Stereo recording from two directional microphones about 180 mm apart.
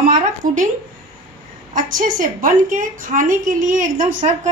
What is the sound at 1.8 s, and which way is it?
A woman's voice, 50° right (ahead or behind).